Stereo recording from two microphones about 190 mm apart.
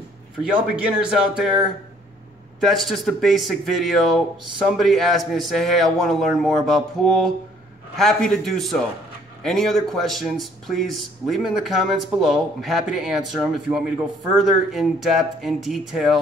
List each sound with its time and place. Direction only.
0.4 s speech: 5° right (ahead or behind)
2.6 s speech: centre (ahead or behind)